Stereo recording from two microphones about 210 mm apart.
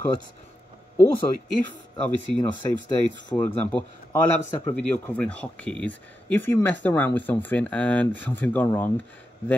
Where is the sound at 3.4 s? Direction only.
5° left (ahead or behind).